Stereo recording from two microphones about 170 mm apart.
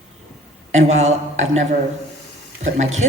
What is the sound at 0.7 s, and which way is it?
Speech, 40° right (ahead or behind).